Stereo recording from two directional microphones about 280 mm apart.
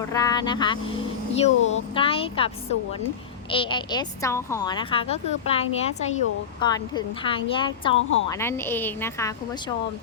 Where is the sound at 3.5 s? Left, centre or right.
Centre.